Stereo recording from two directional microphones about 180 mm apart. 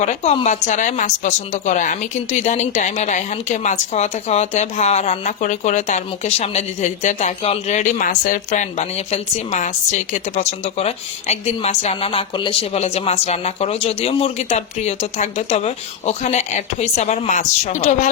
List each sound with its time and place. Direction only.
0.0 s a woman's voice: 40° left (ahead or behind)